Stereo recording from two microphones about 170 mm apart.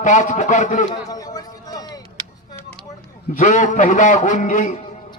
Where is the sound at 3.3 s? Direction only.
45° left (ahead or behind).